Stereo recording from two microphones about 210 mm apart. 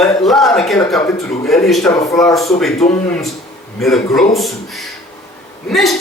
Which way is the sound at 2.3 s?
Centre (ahead or behind).